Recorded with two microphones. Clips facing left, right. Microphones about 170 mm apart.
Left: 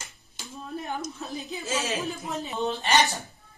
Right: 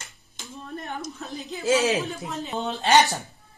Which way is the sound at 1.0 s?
Centre (ahead or behind).